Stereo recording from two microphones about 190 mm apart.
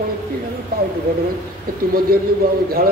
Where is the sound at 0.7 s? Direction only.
50° right (ahead or behind).